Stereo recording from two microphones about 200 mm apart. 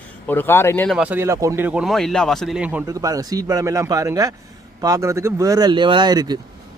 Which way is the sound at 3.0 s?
20° right (ahead or behind).